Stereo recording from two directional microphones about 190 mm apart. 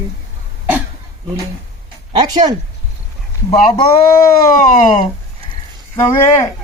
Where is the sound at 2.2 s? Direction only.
20° right (ahead or behind).